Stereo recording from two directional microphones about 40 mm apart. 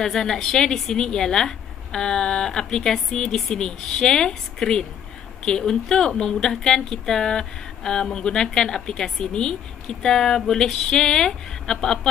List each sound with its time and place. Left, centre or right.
0.0 s a woman's voice: centre